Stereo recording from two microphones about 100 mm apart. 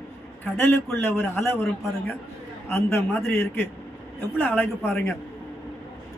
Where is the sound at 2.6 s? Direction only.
25° left (ahead or behind).